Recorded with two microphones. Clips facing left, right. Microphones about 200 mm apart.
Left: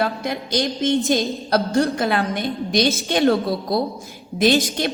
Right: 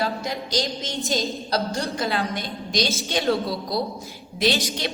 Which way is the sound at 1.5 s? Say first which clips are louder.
Left 7 dB; 55° left (ahead or behind).